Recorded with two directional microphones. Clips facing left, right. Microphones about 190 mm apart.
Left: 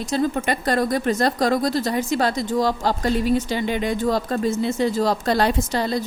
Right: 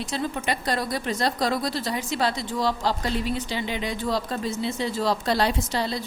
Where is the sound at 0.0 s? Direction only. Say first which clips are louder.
Left 6 dB; 45° left (ahead or behind).